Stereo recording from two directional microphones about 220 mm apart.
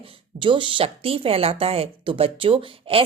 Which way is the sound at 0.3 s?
20° right (ahead or behind).